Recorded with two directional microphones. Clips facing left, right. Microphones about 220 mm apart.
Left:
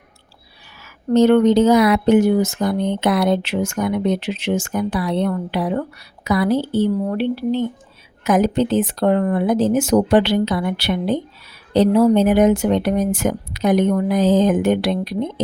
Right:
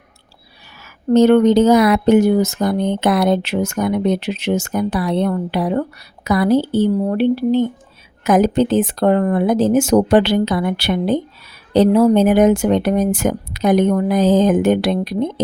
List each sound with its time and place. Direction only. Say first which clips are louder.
1.1 s speech: right 2 dB; 45° right (ahead or behind)